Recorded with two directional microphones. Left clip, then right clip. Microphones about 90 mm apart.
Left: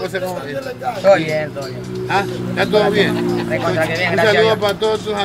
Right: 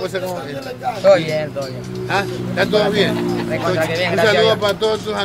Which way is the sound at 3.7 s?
55° right (ahead or behind).